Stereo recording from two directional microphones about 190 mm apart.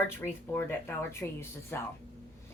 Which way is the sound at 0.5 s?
15° left (ahead or behind).